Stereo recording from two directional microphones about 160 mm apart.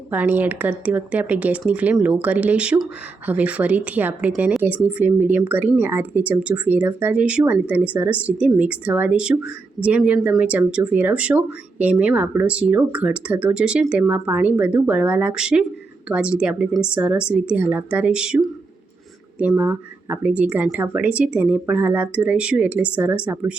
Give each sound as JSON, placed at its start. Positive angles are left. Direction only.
{"t": 0.1, "sound": "speech", "side_deg": -10}